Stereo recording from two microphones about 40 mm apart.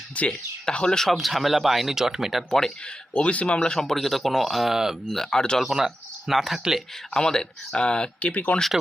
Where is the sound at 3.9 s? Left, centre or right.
Centre.